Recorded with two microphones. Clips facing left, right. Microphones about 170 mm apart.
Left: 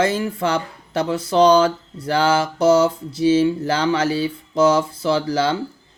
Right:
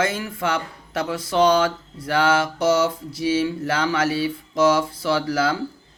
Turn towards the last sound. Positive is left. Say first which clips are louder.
# left 2 dB
turn(degrees=30)  # may be behind; listen again after turning